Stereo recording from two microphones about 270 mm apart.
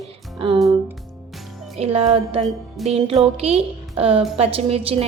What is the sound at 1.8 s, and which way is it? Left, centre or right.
A woman's voice, right.